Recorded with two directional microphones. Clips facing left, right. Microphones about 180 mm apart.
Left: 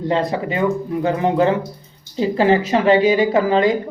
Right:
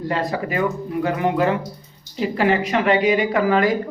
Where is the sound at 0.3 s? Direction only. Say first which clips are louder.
Left 3 dB; 25° left (ahead or behind).